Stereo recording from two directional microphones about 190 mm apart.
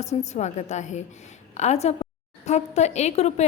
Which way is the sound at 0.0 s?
35° left (ahead or behind).